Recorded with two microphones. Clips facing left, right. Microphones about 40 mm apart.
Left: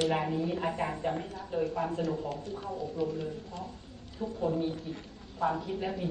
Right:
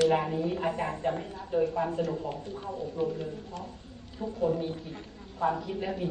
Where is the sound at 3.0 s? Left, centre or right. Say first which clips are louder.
Right 3 dB; right.